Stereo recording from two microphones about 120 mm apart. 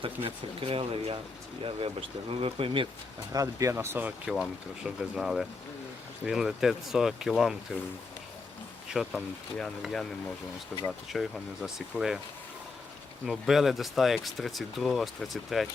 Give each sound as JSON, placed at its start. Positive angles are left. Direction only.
{"t": 0.0, "sound": "speech", "side_deg": -50}
{"t": 3.3, "sound": "speech", "side_deg": -25}
{"t": 4.3, "sound": "speech", "side_deg": -5}
{"t": 8.9, "sound": "speech", "side_deg": 0}
{"t": 13.2, "sound": "speech", "side_deg": 0}